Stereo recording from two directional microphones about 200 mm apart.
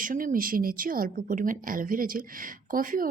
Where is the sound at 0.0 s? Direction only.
40° right (ahead or behind).